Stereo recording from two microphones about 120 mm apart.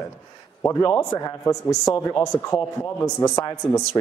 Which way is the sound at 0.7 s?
25° left (ahead or behind).